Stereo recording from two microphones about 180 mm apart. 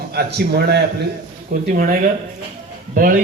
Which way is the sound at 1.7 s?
50° right (ahead or behind).